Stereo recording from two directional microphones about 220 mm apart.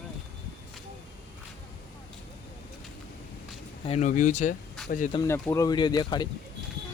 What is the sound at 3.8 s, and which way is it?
Speech, 30° left (ahead or behind).